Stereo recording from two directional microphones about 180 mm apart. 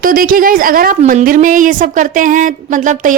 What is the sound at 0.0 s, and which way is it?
A woman's voice, 50° right (ahead or behind).